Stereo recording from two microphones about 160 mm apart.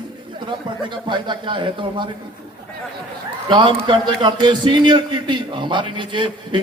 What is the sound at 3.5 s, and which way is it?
A man's voice, 30° right (ahead or behind).